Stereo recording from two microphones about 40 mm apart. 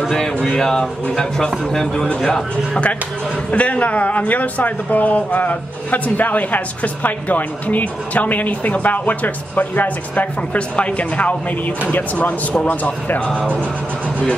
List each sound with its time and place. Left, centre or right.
0.6 s a man's voice: centre
3.5 s speech: left
10.8 s speech: left
11.9 s speech: left